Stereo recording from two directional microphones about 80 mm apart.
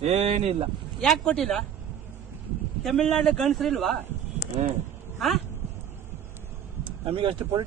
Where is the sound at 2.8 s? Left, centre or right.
Centre.